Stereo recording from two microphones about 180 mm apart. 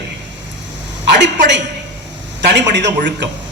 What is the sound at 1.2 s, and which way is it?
A woman's voice, 75° right (ahead or behind).